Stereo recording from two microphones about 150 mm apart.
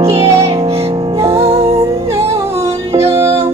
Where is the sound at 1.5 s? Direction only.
40° right (ahead or behind).